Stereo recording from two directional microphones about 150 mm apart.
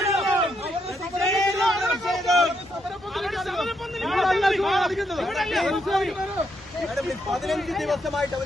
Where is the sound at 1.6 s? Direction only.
Centre (ahead or behind).